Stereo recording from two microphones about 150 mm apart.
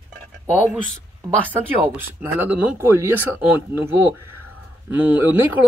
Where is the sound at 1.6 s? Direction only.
15° right (ahead or behind).